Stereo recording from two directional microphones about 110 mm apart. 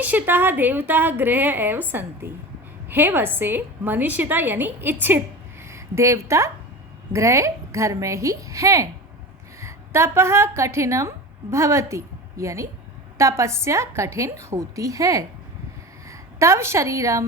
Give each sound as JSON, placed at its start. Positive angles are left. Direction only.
{"t": 0.0, "sound": "a woman's voice", "side_deg": -15}